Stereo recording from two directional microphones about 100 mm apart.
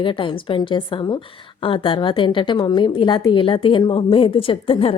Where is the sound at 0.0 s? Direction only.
55° left (ahead or behind).